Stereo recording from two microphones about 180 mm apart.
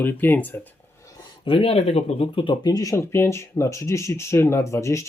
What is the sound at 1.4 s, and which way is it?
Speech, 35° left (ahead or behind).